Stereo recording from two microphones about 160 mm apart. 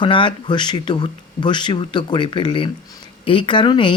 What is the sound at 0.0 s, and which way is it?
Speech, 30° left (ahead or behind).